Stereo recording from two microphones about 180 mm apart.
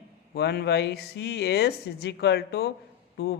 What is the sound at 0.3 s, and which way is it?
Speech, 65° left (ahead or behind).